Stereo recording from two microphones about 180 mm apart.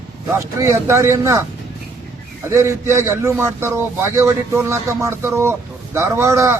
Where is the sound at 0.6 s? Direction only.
15° right (ahead or behind).